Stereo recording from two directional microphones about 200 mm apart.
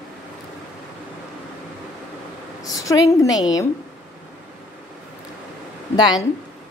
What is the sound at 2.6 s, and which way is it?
A woman's voice, 15° left (ahead or behind).